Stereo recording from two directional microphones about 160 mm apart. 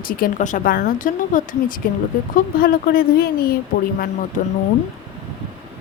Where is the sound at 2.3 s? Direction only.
65° left (ahead or behind).